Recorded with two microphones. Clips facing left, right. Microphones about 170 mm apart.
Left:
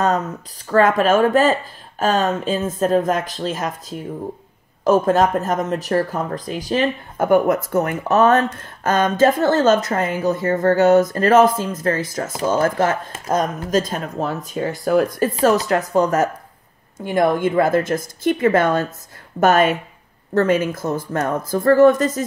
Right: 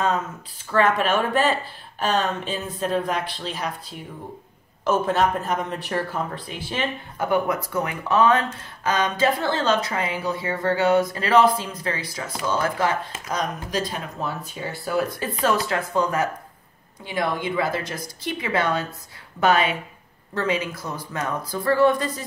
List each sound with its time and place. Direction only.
0.7 s speech: 40° left (ahead or behind)